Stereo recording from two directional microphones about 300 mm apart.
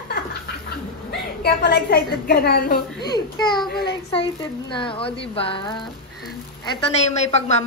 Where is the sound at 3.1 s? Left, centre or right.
Centre.